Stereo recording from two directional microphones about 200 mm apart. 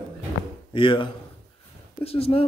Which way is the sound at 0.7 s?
25° left (ahead or behind).